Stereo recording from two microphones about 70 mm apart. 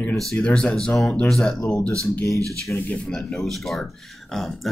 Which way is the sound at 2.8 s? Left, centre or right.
Centre.